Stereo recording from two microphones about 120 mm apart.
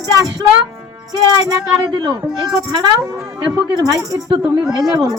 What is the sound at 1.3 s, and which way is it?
Speech, 35° right (ahead or behind).